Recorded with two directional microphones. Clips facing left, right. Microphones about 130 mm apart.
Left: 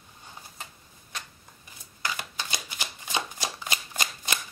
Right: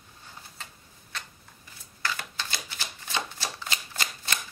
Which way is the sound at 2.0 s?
15° left (ahead or behind).